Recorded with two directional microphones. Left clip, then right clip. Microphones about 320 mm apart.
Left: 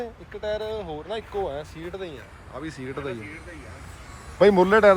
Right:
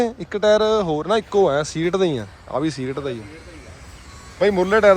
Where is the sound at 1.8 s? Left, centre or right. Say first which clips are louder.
Right 15 dB; right.